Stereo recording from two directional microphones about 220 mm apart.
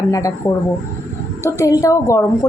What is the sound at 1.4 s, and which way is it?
A woman's voice, 15° left (ahead or behind).